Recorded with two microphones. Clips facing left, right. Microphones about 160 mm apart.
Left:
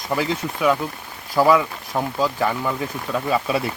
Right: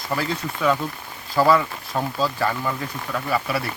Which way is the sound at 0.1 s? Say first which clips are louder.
Left 3 dB; 15° left (ahead or behind).